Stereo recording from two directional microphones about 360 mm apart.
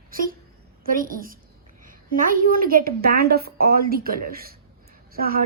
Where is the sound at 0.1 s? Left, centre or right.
Right.